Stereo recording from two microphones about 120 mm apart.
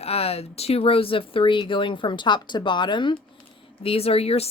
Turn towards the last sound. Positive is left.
turn(degrees=55)  # may be behind; listen again after turning